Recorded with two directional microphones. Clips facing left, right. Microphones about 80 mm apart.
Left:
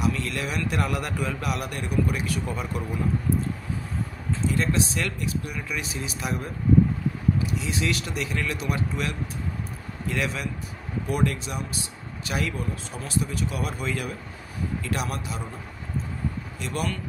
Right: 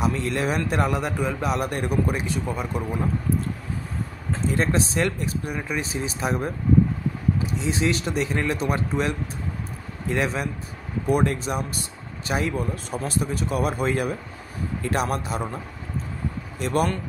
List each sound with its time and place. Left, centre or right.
0.0 s speech: right
0.8 s a man's voice: right
2.4 s a man's voice: centre
4.3 s speech: right
7.5 s speech: right
12.9 s speech: right
16.5 s speech: right